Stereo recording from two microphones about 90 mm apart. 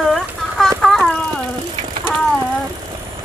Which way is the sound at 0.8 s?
10° left (ahead or behind).